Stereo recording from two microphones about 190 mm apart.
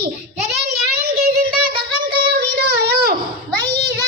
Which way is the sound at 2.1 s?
55° right (ahead or behind).